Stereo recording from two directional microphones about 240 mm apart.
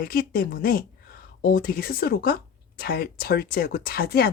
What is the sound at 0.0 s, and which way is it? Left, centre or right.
Speech, left.